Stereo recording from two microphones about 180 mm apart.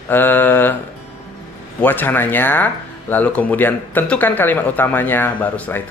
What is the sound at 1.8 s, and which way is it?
Speech, 10° left (ahead or behind).